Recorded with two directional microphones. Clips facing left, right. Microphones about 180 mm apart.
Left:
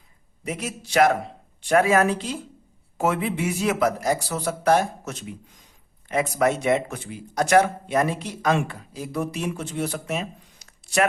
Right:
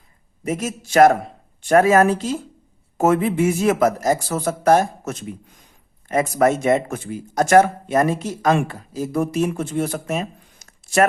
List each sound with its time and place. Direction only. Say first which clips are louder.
0.4 s speech: right 6 dB; 45° right (ahead or behind)